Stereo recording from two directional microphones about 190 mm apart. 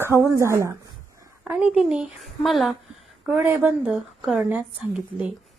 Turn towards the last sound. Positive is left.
turn(degrees=-5)  # may be behind; listen again after turning